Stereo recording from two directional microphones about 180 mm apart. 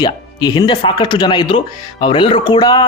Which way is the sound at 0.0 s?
20° left (ahead or behind).